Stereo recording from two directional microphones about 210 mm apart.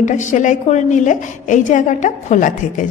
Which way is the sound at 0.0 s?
35° left (ahead or behind).